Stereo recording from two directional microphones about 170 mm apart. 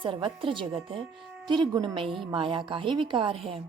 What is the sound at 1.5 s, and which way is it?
A woman's voice, 25° right (ahead or behind).